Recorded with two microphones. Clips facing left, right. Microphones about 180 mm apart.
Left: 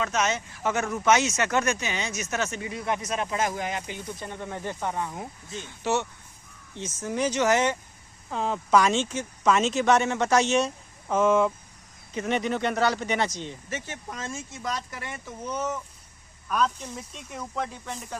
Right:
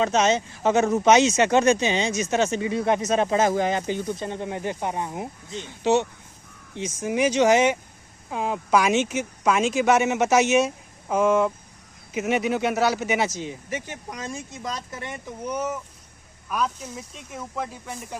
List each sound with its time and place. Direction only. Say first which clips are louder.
0.0 s speech: right 6 dB; 25° right (ahead or behind); by 8.9 s 5° right (ahead or behind)
8.9 s speech: right 4 dB; 20° right (ahead or behind)
15.4 s speech: right 2 dB; 10° right (ahead or behind)